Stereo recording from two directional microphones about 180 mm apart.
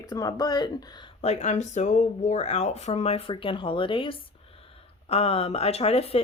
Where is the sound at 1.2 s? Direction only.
40° left (ahead or behind).